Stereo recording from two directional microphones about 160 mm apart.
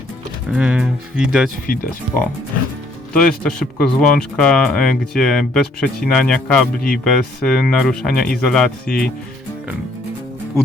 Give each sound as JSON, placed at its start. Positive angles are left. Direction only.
{"t": 0.5, "sound": "speech", "side_deg": -5}
{"t": 1.6, "sound": "speech", "side_deg": 60}
{"t": 3.1, "sound": "speech", "side_deg": 5}